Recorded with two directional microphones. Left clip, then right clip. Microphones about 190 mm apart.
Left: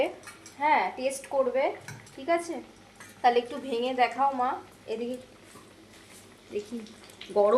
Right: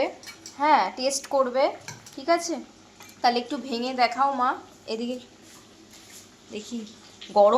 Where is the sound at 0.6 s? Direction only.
15° right (ahead or behind).